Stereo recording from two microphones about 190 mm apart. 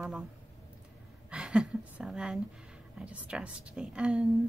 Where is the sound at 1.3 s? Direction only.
5° right (ahead or behind).